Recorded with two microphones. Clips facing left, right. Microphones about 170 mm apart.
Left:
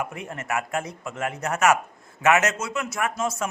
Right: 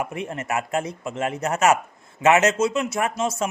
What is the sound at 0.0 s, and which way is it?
A man's voice, 25° right (ahead or behind).